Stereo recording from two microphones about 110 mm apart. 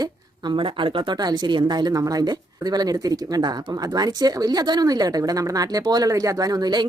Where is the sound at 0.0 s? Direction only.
45° right (ahead or behind).